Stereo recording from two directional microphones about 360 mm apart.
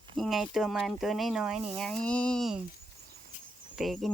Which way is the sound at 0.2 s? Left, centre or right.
Centre.